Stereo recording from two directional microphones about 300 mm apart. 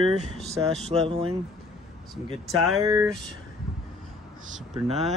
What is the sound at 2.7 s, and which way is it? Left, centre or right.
Speech, centre.